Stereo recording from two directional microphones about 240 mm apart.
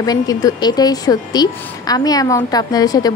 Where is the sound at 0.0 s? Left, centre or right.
Centre.